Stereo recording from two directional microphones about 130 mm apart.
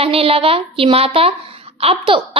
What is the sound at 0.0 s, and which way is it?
A woman's voice, 45° right (ahead or behind).